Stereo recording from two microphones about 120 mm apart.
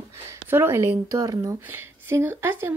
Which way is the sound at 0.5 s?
20° right (ahead or behind).